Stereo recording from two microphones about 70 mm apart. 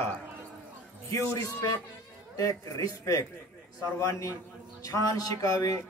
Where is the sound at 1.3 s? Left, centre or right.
Left.